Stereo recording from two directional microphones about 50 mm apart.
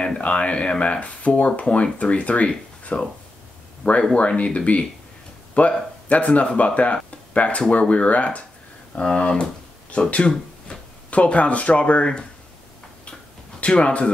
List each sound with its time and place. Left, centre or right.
0.2 s speech: left
8.9 s speech: centre
9.8 s speech: left
13.6 s speech: left